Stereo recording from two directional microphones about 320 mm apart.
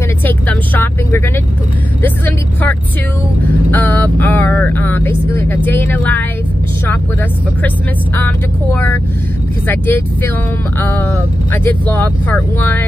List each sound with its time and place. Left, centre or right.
0.2 s vehicle: centre
8.2 s speech: centre